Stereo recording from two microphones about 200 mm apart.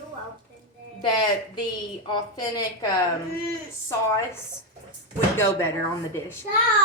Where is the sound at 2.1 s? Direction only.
20° left (ahead or behind).